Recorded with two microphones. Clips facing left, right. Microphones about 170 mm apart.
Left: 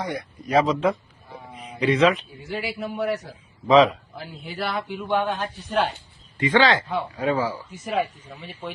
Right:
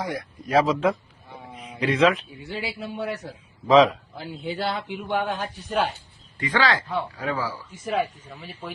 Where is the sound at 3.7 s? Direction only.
Centre (ahead or behind).